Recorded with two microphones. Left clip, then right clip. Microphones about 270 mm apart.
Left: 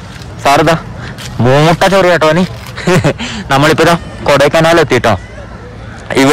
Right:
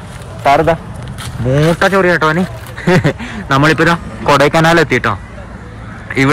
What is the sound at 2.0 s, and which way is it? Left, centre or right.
Speech, centre.